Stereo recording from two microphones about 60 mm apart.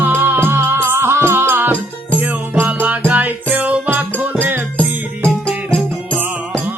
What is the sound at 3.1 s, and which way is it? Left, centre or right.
Music, right.